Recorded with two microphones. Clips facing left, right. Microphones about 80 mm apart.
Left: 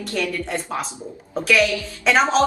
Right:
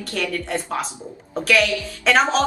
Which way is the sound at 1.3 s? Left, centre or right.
Centre.